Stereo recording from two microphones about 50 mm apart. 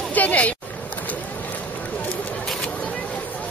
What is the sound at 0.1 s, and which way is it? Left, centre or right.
Speech, left.